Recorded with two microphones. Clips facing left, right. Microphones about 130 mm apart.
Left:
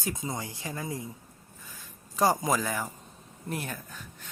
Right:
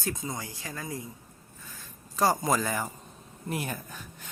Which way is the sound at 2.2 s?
15° left (ahead or behind).